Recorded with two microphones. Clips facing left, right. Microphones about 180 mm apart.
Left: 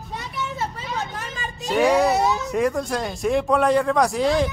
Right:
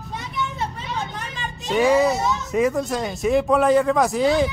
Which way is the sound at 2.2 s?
60° left (ahead or behind).